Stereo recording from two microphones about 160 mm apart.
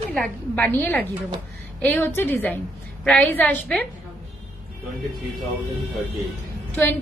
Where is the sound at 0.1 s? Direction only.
5° left (ahead or behind).